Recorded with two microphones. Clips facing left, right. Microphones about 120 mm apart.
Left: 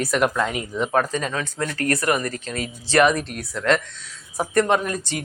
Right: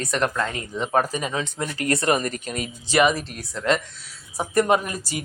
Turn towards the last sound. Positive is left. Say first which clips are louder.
# even
turn(degrees=-10)  # may be behind; listen again after turning